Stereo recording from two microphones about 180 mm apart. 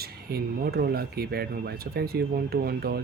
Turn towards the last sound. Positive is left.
turn(degrees=-60)  # may be behind; listen again after turning